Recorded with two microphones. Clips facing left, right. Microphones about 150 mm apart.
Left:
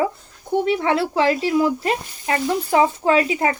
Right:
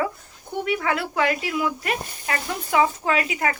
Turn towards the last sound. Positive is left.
turn(degrees=30)  # may be behind; listen again after turning